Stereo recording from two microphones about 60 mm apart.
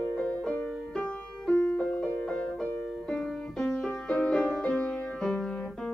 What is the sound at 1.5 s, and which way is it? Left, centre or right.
Music, left.